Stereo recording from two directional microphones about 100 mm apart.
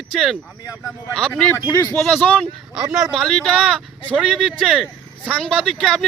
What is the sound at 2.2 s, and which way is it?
Speech, 15° left (ahead or behind).